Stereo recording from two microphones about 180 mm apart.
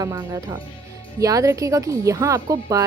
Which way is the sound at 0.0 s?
20° right (ahead or behind).